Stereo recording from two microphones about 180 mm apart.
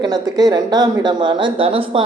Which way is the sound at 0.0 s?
20° right (ahead or behind).